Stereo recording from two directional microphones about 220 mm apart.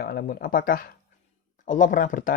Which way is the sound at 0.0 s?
45° left (ahead or behind).